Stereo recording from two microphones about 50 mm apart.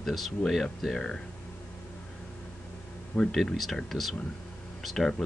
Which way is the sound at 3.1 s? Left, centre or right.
Centre.